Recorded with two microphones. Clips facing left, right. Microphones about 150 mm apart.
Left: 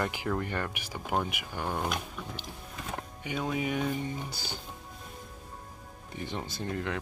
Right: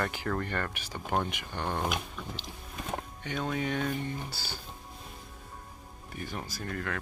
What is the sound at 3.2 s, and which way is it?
Speech, 10° left (ahead or behind).